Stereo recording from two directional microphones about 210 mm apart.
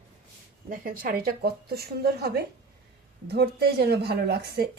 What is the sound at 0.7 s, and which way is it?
A woman's voice, 45° right (ahead or behind).